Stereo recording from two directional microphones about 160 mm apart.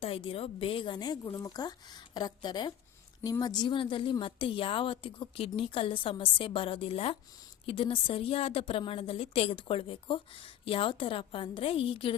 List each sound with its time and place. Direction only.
0.0 s a woman's voice: 35° left (ahead or behind)